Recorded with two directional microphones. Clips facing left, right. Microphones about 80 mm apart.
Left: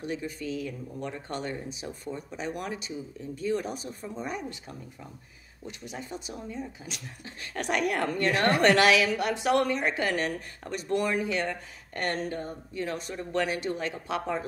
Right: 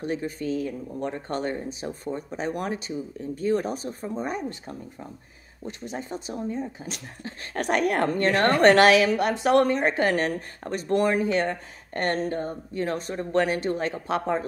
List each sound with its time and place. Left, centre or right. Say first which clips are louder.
0.0 s speech: right 5 dB; right